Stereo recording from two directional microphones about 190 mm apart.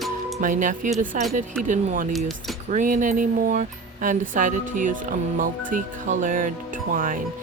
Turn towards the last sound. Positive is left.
turn(degrees=-45)  # may be behind; listen again after turning